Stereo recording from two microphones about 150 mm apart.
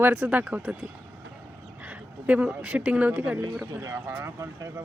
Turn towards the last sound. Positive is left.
turn(degrees=-20)  # may be behind; listen again after turning